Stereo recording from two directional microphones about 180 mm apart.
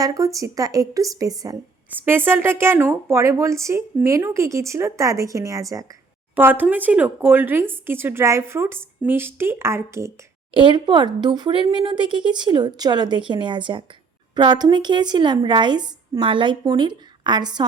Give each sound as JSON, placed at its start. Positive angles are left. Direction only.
{"t": 0.0, "sound": "a woman's voice", "side_deg": -20}
{"t": 10.5, "sound": "speech", "side_deg": -25}